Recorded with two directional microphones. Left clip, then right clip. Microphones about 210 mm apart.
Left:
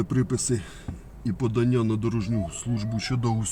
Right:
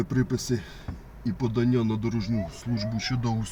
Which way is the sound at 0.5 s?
35° left (ahead or behind).